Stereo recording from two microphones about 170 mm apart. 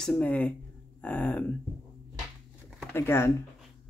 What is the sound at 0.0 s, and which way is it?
Speech, 5° left (ahead or behind).